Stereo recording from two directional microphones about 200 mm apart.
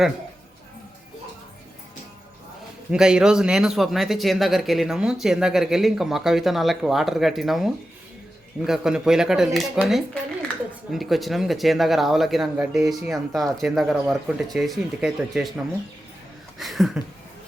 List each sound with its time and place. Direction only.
2.9 s speech: 5° right (ahead or behind)